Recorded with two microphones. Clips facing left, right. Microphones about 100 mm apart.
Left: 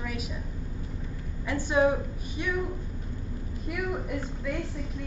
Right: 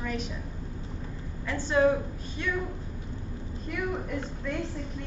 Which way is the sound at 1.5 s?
15° left (ahead or behind).